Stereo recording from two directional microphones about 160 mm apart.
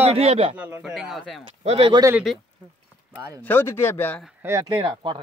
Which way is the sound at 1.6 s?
35° right (ahead or behind).